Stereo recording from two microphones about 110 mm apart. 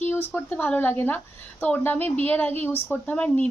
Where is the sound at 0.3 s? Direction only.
15° left (ahead or behind).